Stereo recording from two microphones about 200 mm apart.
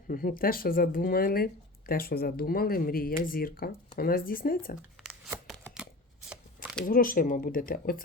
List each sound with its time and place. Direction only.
0.1 s speech: 45° left (ahead or behind)
5.5 s a sound: 5° right (ahead or behind)
6.8 s speech: 45° left (ahead or behind)